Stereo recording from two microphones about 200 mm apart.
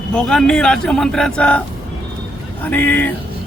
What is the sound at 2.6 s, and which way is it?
Speech, 10° left (ahead or behind).